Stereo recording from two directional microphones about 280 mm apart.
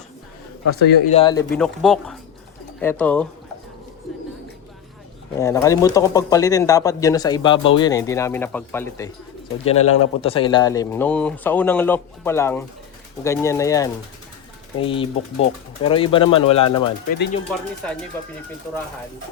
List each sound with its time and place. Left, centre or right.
0.6 s a man's voice: left
1.1 s speech: centre
1.5 s speech: centre
5.4 s speech: centre
9.8 s a man's voice: left
10.2 s speech: centre